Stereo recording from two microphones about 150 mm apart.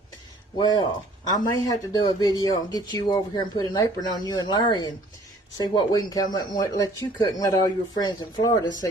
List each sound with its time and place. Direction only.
0.6 s speech: 30° left (ahead or behind)